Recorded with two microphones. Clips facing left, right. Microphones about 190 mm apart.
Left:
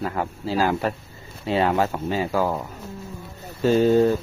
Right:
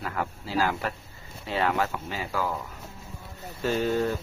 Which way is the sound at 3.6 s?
30° left (ahead or behind).